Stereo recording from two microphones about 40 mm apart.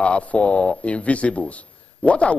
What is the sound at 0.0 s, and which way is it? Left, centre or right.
A man's voice, left.